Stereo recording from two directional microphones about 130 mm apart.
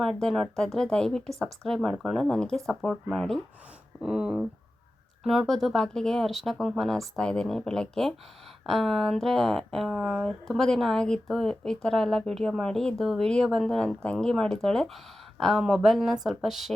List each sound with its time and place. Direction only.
0.0 s speech: 5° left (ahead or behind)